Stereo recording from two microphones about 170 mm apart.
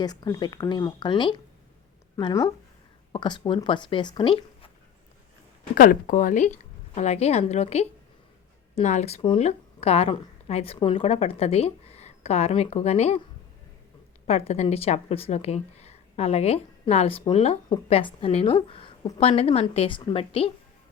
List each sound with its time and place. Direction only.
0.0 s speech: 25° left (ahead or behind)
5.7 s a woman's voice: 55° left (ahead or behind)
14.3 s a woman's voice: 40° left (ahead or behind)